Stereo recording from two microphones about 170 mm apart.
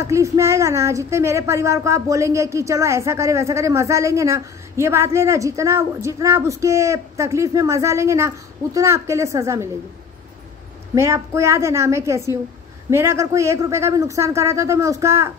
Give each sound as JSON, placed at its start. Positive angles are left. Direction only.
{"t": 0.0, "sound": "speech", "side_deg": -15}
{"t": 11.0, "sound": "speech", "side_deg": -15}